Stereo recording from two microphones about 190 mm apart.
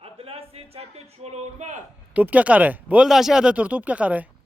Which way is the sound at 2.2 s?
5° right (ahead or behind).